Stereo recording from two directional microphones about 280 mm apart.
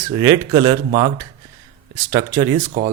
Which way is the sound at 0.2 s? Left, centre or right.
Centre.